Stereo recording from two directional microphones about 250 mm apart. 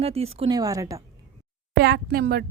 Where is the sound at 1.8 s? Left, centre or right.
Right.